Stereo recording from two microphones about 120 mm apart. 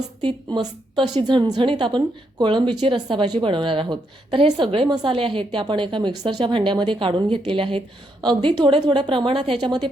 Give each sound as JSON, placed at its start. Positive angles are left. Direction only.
{"t": 0.2, "sound": "a woman's voice", "side_deg": -40}